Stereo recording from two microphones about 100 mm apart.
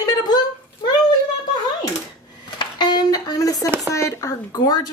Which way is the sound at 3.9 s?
35° left (ahead or behind).